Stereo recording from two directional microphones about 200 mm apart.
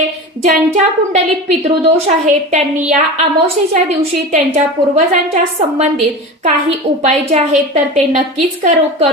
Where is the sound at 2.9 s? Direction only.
35° right (ahead or behind).